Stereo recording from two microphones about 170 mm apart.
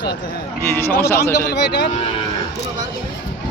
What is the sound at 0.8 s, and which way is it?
Speech, 15° left (ahead or behind).